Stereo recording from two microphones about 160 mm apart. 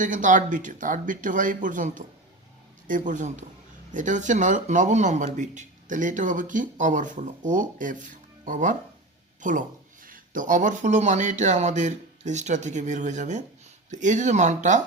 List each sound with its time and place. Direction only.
0.0 s speech: 50° right (ahead or behind)